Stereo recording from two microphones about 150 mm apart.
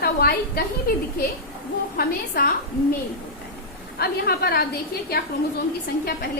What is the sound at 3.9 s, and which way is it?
Speech, 90° left.